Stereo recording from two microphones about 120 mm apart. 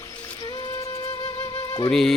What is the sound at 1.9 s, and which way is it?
Speech, 5° left (ahead or behind).